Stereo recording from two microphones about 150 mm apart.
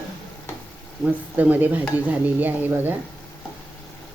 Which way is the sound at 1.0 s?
10° right (ahead or behind).